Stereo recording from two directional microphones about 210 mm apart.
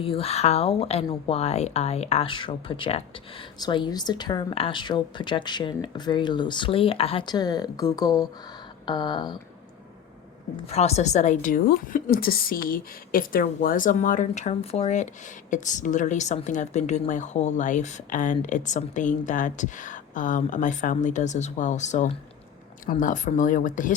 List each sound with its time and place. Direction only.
0.0 s speech: 25° left (ahead or behind)
10.7 s a woman's voice: 30° left (ahead or behind)